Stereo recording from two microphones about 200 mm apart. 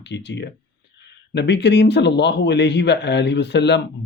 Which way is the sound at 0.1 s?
60° left (ahead or behind).